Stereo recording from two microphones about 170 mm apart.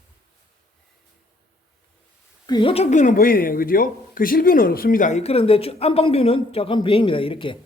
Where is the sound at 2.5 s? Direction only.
30° left (ahead or behind).